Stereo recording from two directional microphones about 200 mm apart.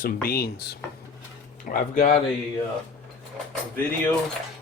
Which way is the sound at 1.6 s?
40° left (ahead or behind).